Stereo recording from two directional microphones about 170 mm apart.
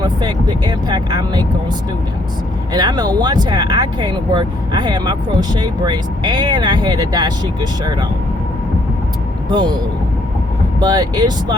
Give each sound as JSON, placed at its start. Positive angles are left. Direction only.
{"t": 0.0, "sound": "speech", "side_deg": -25}
{"t": 2.7, "sound": "speech", "side_deg": -25}
{"t": 9.5, "sound": "speech", "side_deg": -25}
{"t": 10.8, "sound": "speech", "side_deg": -25}